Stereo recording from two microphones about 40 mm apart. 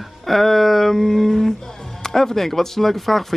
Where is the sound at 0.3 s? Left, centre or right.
Centre.